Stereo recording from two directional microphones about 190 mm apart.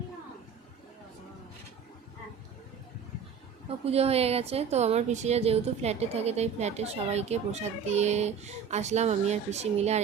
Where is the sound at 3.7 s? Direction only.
30° right (ahead or behind).